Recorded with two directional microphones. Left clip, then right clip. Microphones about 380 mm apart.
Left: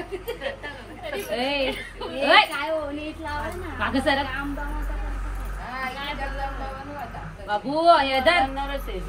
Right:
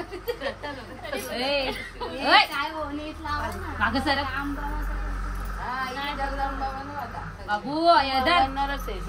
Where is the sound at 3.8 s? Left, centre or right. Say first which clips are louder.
Left 1 dB; centre.